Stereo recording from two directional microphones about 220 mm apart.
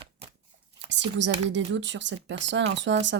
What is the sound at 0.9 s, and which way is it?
Speech, 55° right (ahead or behind).